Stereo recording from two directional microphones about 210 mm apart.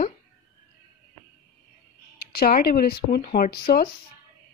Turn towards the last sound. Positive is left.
turn(degrees=45)  # may be behind; listen again after turning